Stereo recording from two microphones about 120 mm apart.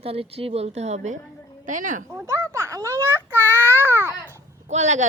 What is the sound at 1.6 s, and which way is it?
Speech, 90° right.